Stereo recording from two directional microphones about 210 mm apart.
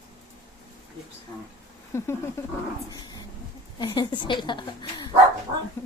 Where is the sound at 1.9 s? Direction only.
10° left (ahead or behind).